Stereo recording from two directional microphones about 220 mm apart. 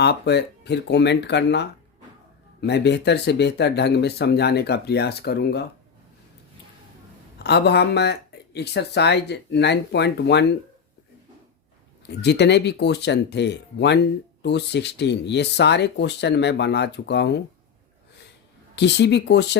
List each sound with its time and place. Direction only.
0.0 s speech: 50° left (ahead or behind)
7.3 s speech: 50° left (ahead or behind)
12.0 s speech: 50° left (ahead or behind)
18.8 s speech: 50° left (ahead or behind)